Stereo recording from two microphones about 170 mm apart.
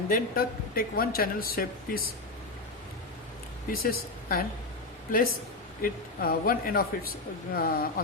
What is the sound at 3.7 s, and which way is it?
Speech, 60° left (ahead or behind).